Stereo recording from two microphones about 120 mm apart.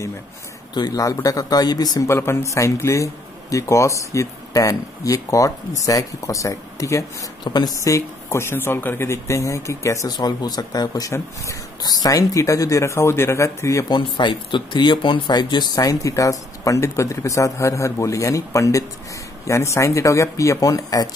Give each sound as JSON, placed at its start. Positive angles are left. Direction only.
{"t": 0.7, "sound": "speech", "side_deg": 35}
{"t": 10.1, "sound": "speech", "side_deg": 35}
{"t": 13.9, "sound": "speech", "side_deg": 40}